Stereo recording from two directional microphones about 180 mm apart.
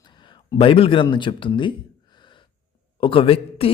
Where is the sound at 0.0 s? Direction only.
25° left (ahead or behind).